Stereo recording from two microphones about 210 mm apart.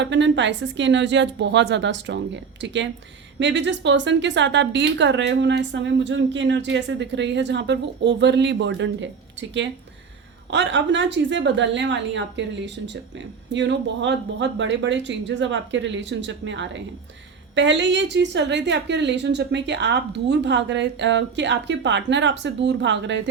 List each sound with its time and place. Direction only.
0.0 s a woman's voice: 60° right (ahead or behind)
10.5 s a woman's voice: 60° right (ahead or behind)